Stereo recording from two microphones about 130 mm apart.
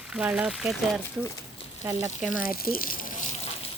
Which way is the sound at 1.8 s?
20° right (ahead or behind).